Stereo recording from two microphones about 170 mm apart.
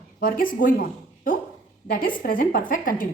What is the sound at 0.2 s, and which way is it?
A woman's voice, 55° left (ahead or behind).